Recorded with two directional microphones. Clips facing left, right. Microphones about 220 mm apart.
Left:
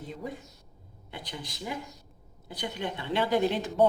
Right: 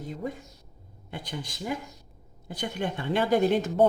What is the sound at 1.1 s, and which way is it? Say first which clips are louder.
Speech: right 4 dB; 50° right (ahead or behind).